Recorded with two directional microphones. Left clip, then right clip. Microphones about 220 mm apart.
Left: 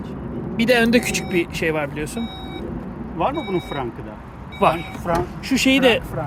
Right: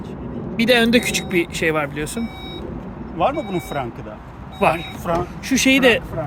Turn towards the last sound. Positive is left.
turn(degrees=-5)  # may be behind; listen again after turning